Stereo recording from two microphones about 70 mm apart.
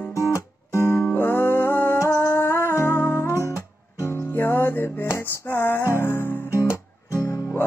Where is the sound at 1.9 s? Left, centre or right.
Left.